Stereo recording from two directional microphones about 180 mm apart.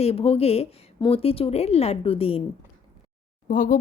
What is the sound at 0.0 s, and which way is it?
A woman's voice, 35° left (ahead or behind).